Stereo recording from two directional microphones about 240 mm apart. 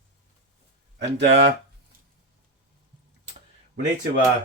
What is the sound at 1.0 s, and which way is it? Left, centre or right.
Speech, right.